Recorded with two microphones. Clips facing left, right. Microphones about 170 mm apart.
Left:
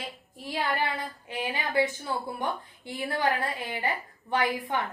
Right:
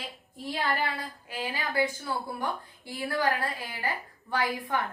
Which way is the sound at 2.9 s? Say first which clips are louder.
Left 1 dB; 20° left (ahead or behind).